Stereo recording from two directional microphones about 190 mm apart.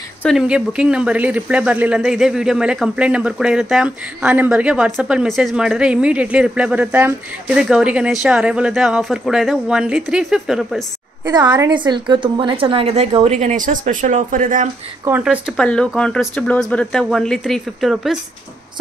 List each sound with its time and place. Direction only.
0.2 s speech: centre (ahead or behind)
11.5 s a woman's voice: 25° right (ahead or behind); by 14.7 s 40° right (ahead or behind)
15.0 s speech: 10° right (ahead or behind)